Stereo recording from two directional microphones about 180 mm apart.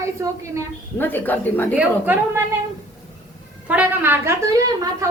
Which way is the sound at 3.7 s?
10° right (ahead or behind).